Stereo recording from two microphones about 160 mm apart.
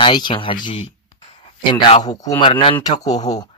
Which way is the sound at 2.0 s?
25° left (ahead or behind).